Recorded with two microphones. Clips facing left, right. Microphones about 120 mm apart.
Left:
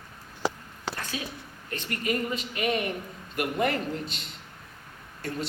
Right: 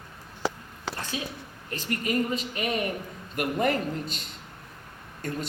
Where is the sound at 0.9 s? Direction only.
30° right (ahead or behind).